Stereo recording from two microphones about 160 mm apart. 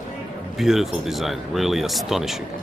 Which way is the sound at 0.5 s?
Centre (ahead or behind).